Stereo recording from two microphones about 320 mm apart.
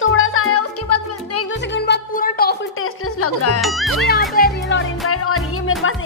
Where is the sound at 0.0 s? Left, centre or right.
Left.